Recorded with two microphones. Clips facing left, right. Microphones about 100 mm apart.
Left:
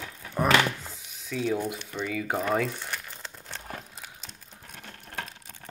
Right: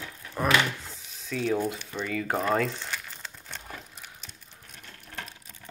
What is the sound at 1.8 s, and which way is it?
Speech, 10° left (ahead or behind).